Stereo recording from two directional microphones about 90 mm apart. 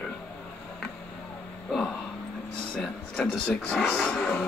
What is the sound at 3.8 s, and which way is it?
Vehicle, 20° left (ahead or behind).